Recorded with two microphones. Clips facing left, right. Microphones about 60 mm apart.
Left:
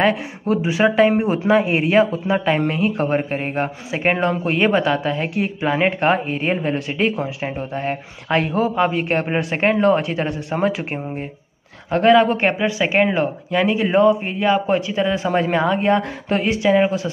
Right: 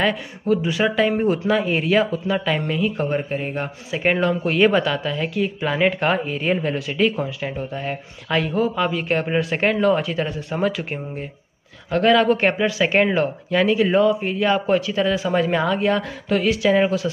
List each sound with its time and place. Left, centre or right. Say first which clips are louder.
0.5 s speech: left 2 dB; left